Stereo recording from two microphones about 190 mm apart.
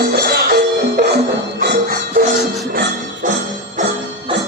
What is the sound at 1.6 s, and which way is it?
Music, 55° right (ahead or behind).